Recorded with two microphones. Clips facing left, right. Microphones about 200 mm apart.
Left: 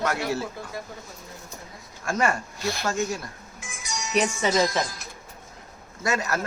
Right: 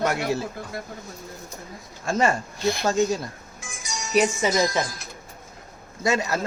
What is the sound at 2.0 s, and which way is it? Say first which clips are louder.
Speech: right 3 dB; 25° right (ahead or behind).